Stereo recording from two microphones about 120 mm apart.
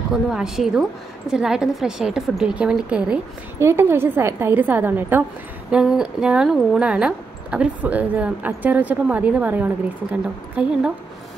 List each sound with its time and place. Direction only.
0.1 s a woman's voice: 5° right (ahead or behind)
3.5 s a woman's voice: 20° right (ahead or behind)
5.7 s speech: 5° right (ahead or behind)